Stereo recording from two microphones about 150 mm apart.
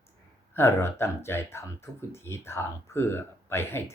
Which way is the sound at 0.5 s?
15° left (ahead or behind).